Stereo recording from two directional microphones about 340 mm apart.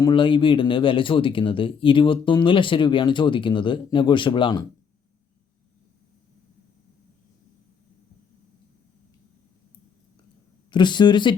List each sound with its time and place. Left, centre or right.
0.0 s speech: centre
10.7 s speech: centre